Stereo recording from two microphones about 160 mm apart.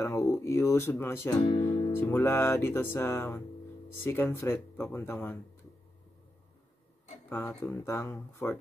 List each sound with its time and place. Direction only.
0.0 s speech: 20° left (ahead or behind)
1.4 s music: 35° left (ahead or behind)
1.9 s music: 15° left (ahead or behind)
7.2 s music: 15° left (ahead or behind)